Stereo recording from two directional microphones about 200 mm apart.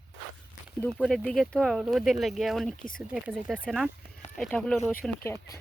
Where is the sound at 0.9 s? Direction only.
Centre (ahead or behind).